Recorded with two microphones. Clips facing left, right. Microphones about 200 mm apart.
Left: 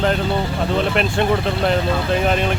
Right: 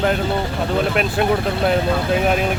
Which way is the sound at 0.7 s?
5° right (ahead or behind).